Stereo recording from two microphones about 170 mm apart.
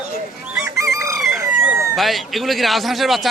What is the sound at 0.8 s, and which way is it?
Chicken, 20° right (ahead or behind).